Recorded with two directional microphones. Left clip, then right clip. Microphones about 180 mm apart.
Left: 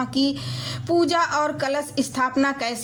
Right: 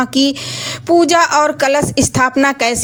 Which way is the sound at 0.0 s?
40° right (ahead or behind).